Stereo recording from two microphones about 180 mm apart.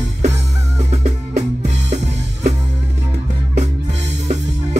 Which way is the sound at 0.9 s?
40° right (ahead or behind).